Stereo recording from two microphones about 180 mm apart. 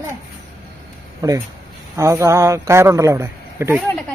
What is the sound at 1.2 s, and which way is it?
A man's voice, 20° right (ahead or behind).